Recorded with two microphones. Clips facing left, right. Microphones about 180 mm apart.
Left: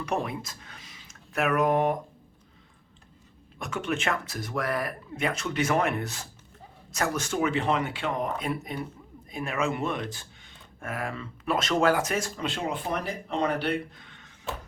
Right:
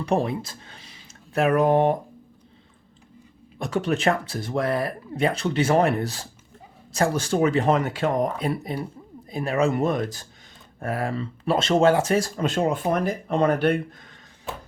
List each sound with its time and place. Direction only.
0.0 s speech: 30° right (ahead or behind)
3.6 s speech: 35° right (ahead or behind)
12.4 s speech: 45° right (ahead or behind)